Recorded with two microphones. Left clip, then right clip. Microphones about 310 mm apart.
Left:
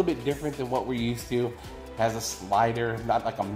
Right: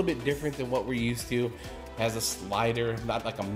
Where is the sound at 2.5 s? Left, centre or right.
Right.